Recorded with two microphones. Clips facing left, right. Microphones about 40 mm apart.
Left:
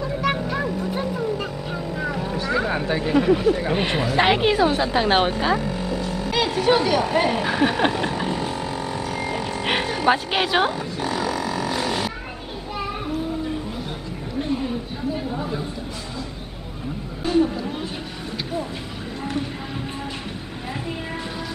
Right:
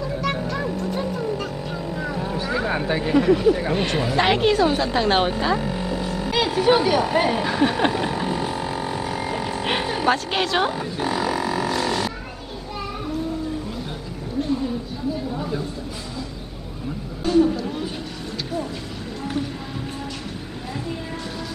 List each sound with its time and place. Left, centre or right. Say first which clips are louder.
0.1 s music: left 3 dB; centre
0.7 s vehicle: even; centre
2.2 s vehicle: even; centre
2.5 s speech: left 1 dB; centre
3.2 s a woman's voice: right 1 dB; centre
3.7 s a woman's voice: even; centre
5.6 s a sound: even; centre
10.0 s a woman's voice: left 2 dB; centre
10.7 s roaring cats: right 1 dB; centre
11.7 s a sound: right 1 dB; centre
15.3 s a sound: even; centre
17.2 s a sound: right 2 dB; centre